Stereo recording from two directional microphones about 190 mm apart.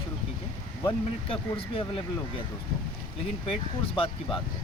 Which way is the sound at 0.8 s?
30° left (ahead or behind).